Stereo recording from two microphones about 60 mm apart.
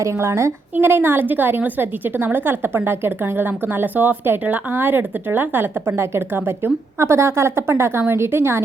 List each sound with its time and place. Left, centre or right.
0.0 s a woman's voice: right
0.8 s a woman's voice: right